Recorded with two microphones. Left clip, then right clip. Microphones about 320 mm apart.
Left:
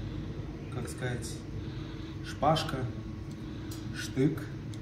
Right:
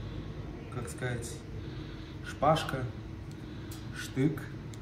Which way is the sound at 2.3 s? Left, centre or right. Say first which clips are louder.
Right 1 dB; centre.